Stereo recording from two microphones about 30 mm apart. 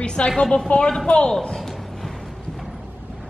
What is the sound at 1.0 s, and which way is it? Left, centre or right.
Speech, left.